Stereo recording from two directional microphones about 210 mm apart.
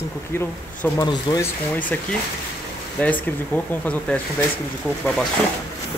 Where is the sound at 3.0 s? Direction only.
5° left (ahead or behind).